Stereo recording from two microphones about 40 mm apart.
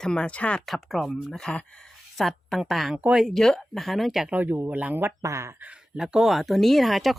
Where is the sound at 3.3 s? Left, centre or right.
Centre.